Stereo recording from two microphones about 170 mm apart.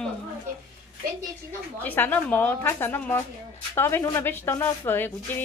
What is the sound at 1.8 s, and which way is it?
A woman's voice, 10° left (ahead or behind).